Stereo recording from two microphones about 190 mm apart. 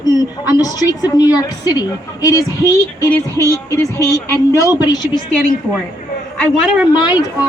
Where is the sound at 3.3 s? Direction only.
15° right (ahead or behind).